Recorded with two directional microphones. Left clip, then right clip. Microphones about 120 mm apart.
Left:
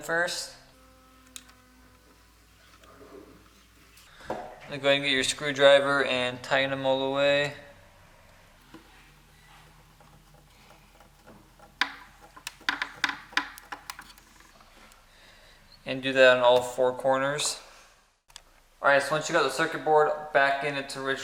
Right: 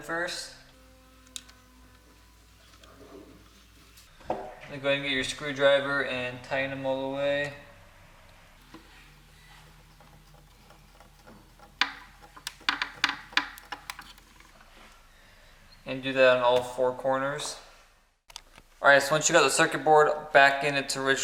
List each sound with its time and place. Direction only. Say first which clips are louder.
0.1 s speech: left 4 dB; 45° left (ahead or behind)
4.7 s speech: left 4 dB; 30° left (ahead or behind)
11.6 s a sound: right 1 dB; centre (ahead or behind)
15.8 s speech: left 2 dB; 15° left (ahead or behind)
18.8 s speech: right 2 dB; 20° right (ahead or behind)